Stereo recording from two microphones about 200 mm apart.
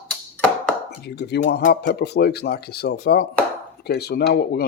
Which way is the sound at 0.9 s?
55° left (ahead or behind).